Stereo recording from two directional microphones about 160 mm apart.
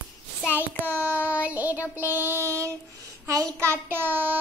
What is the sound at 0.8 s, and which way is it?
Child singing, 10° right (ahead or behind).